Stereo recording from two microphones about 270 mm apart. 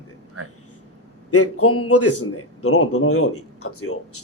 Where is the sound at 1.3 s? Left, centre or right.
Left.